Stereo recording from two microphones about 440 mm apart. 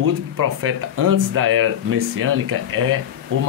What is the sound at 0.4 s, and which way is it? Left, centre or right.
Speech, right.